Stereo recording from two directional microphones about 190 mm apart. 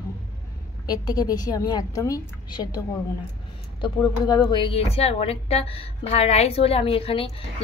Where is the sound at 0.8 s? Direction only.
20° left (ahead or behind).